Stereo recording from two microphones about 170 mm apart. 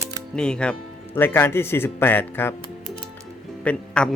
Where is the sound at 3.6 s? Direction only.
5° left (ahead or behind).